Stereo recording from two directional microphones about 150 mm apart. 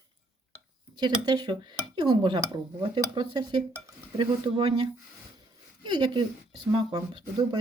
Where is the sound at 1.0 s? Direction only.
30° right (ahead or behind).